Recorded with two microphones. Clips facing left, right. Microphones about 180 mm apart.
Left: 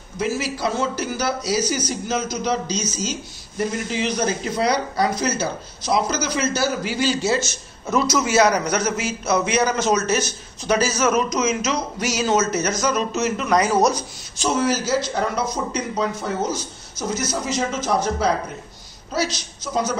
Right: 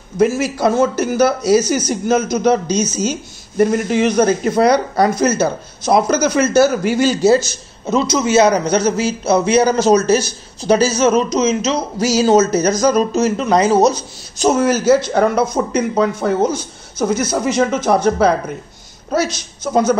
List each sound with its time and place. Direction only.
0.2 s a man's voice: 50° right (ahead or behind)
7.8 s a man's voice: 20° right (ahead or behind)
14.4 s a man's voice: 50° right (ahead or behind)